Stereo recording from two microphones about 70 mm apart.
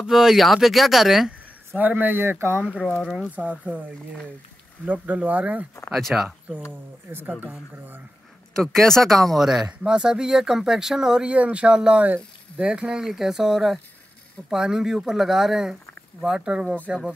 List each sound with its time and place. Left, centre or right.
0.0 s speech: centre
1.8 s speech: right
2.6 s speech: centre
5.9 s speech: centre
6.7 s speech: right
8.5 s speech: centre